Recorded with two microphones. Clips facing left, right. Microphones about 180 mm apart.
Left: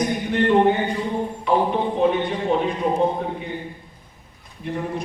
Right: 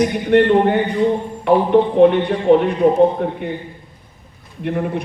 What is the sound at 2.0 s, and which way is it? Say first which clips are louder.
Speech: right 8 dB; 60° right (ahead or behind).